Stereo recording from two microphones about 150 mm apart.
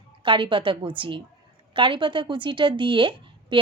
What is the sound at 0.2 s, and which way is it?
A woman's voice, 35° right (ahead or behind).